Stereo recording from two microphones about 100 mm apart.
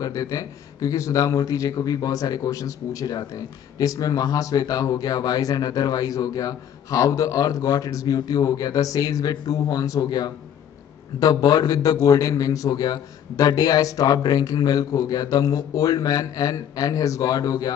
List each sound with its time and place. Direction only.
0.0 s speech: 35° left (ahead or behind)